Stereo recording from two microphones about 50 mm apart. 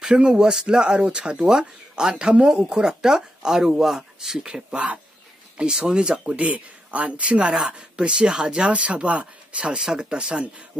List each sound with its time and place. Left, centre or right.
0.0 s speech: centre
4.7 s speech: right